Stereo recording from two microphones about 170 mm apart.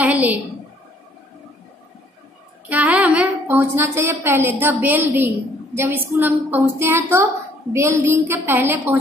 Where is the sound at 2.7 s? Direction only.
10° right (ahead or behind).